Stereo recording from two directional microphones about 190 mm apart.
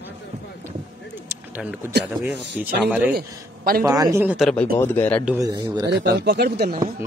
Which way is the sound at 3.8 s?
20° right (ahead or behind).